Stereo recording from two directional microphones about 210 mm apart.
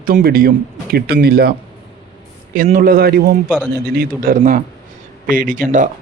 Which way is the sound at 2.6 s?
40° right (ahead or behind).